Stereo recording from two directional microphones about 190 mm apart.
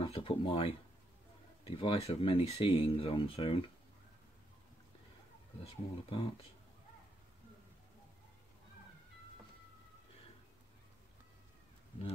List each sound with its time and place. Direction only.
0.0 s speech: 30° left (ahead or behind)
5.6 s speech: 30° left (ahead or behind)